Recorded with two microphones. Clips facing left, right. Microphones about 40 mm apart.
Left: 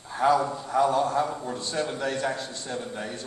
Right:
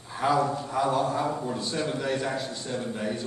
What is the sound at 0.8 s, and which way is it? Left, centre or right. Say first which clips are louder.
A man's voice: left 1 dB; centre.